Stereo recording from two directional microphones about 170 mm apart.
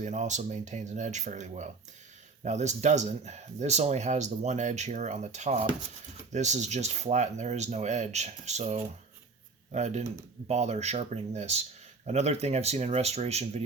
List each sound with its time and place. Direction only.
0.0 s speech: 45° right (ahead or behind)